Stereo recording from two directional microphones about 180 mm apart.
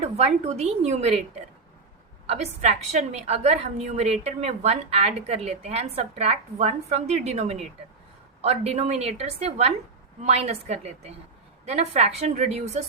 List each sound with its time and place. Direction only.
0.0 s a woman's voice: 35° right (ahead or behind)
2.2 s a woman's voice: 35° right (ahead or behind)